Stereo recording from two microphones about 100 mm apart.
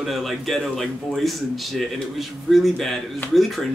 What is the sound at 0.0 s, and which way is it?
A man's voice, centre (ahead or behind).